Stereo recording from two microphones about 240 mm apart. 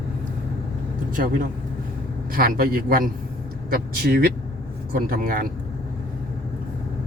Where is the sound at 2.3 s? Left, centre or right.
Right.